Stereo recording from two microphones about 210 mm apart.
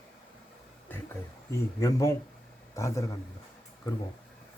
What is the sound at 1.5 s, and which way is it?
Speech, 15° left (ahead or behind).